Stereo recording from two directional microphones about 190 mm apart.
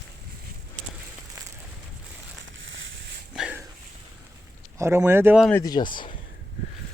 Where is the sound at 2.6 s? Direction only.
80° right.